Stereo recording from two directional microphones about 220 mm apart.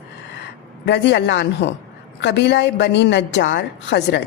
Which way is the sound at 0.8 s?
50° left (ahead or behind).